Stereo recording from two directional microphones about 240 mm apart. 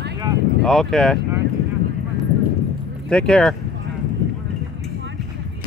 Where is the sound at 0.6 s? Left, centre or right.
Centre.